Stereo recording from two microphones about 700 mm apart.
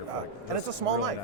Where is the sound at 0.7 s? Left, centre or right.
Right.